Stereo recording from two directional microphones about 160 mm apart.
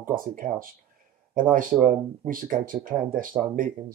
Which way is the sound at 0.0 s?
55° right (ahead or behind).